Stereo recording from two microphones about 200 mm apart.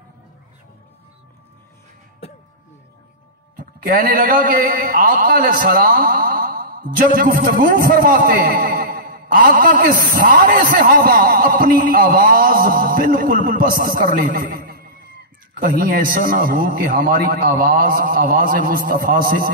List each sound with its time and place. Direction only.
3.8 s a man's voice: 45° right (ahead or behind)